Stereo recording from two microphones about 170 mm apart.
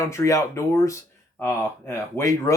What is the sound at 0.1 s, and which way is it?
Speech, 15° left (ahead or behind).